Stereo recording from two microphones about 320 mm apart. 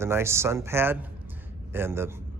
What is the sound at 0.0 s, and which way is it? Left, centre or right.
Speech, centre.